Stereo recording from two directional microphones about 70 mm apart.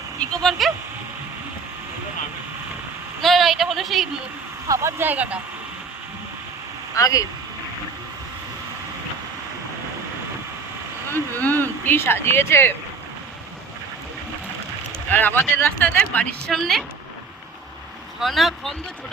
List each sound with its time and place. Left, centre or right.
0.2 s a sound: centre
3.2 s a sound: centre
4.7 s speech: right
5.0 s speech: right
6.9 s speech: left
11.1 s speech: left
15.1 s speech: left
16.5 s a woman's voice: centre
18.2 s speech: centre